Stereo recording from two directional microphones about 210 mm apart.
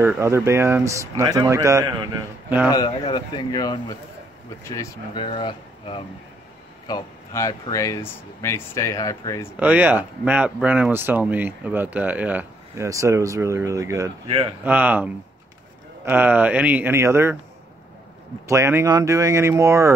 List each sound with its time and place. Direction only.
0.0 s speech: 10° right (ahead or behind)
2.7 s speech: 20° left (ahead or behind)
9.6 s speech: 10° right (ahead or behind)
14.2 s a man's voice: 25° right (ahead or behind)
14.6 s speech: 10° right (ahead or behind)
16.1 s speech: 10° right (ahead or behind)
18.5 s speech: 15° right (ahead or behind)